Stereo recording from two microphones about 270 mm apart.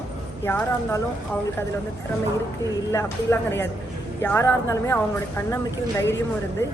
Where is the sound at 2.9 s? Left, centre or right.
Centre.